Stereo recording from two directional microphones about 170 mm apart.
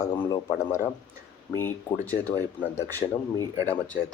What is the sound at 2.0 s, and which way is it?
Speech, 10° left (ahead or behind).